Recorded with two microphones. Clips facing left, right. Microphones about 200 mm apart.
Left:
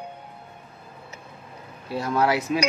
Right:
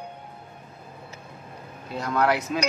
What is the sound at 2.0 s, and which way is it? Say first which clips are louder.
Speech: left 1 dB; 25° left (ahead or behind).